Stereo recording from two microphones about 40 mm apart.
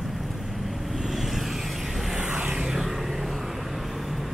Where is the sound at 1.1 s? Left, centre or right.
Centre.